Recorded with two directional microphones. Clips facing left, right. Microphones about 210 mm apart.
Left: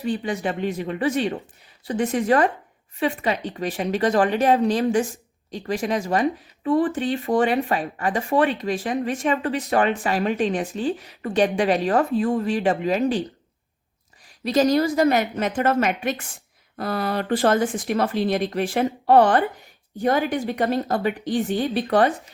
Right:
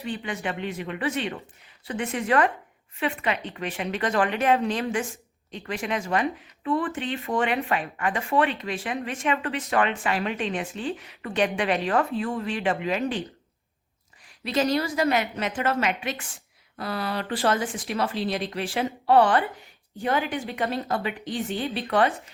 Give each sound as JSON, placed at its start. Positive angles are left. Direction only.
{"t": 0.0, "sound": "speech", "side_deg": 40}
{"t": 14.4, "sound": "speech", "side_deg": 40}